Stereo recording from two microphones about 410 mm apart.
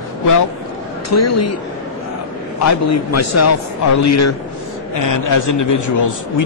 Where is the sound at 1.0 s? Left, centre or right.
Left.